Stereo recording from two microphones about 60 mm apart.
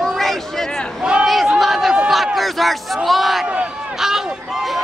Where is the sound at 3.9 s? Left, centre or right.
Centre.